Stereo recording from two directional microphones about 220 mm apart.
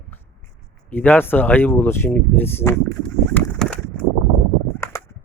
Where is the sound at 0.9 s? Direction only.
10° left (ahead or behind).